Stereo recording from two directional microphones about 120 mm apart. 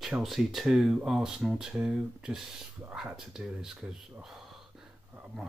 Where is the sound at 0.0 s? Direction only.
Centre (ahead or behind).